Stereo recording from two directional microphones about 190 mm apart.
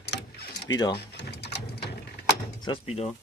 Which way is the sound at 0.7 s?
20° left (ahead or behind).